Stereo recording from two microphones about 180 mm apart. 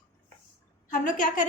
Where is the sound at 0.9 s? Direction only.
45° left (ahead or behind).